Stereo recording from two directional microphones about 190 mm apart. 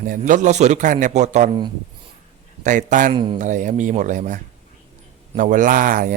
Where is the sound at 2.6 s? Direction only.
40° right (ahead or behind).